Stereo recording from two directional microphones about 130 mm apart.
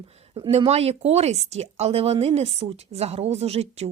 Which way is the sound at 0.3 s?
40° right (ahead or behind).